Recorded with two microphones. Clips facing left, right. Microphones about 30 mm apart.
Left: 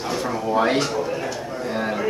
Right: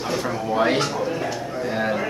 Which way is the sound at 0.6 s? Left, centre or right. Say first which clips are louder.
Even; centre.